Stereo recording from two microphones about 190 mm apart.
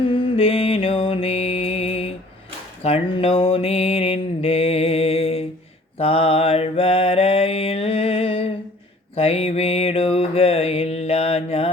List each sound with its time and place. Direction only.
0.0 s mantra: 25° left (ahead or behind)